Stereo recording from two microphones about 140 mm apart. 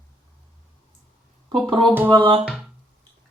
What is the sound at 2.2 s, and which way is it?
Speech, 40° right (ahead or behind).